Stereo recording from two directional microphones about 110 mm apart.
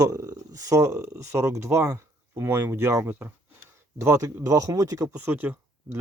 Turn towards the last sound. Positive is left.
turn(degrees=-20)  # may be behind; listen again after turning